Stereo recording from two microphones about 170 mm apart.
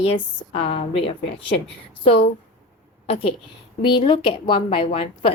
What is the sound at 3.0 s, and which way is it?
A woman's voice, 35° left (ahead or behind).